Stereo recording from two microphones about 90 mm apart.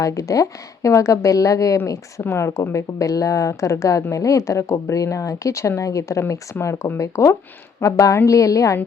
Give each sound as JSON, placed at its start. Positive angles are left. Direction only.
{"t": 0.0, "sound": "speech", "side_deg": 40}